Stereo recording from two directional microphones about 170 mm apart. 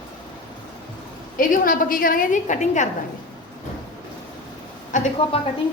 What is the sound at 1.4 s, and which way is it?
A woman's voice, 55° left (ahead or behind).